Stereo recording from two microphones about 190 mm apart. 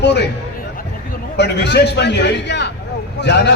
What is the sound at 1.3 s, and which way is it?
A man's voice, 65° left (ahead or behind).